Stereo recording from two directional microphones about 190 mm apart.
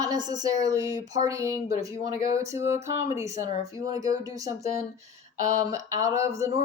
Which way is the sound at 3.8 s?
20° right (ahead or behind).